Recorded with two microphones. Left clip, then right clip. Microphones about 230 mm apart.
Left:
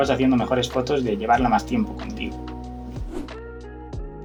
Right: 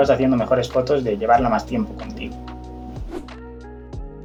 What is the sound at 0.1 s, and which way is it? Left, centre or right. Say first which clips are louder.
Speech: right 4 dB; left.